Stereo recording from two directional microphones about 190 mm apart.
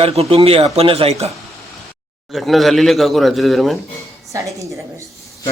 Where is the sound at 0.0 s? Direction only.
30° right (ahead or behind).